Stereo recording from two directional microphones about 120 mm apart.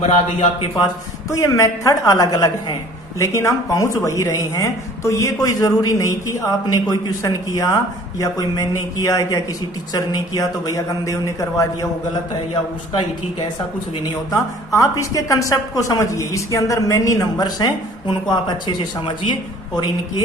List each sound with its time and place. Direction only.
0.0 s speech: 70° left (ahead or behind)
1.3 s a woman's voice: 25° left (ahead or behind)
13.9 s a woman's voice: 30° left (ahead or behind)